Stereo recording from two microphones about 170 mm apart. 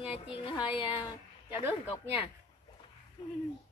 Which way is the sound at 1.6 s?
10° right (ahead or behind).